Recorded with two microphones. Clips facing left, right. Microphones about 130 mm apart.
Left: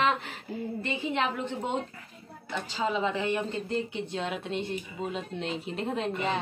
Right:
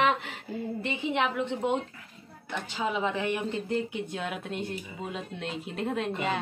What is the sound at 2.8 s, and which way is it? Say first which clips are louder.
A man's voice: left 1 dB; 5° right (ahead or behind).